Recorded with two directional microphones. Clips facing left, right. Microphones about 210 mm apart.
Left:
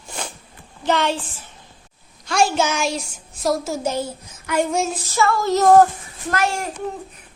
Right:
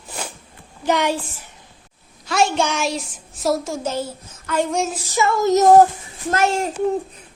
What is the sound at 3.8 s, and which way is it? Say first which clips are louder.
A child's voice: left 1 dB; 15° left (ahead or behind).